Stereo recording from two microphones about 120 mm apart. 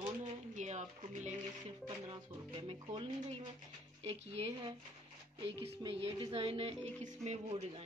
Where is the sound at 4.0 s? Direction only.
60° right (ahead or behind).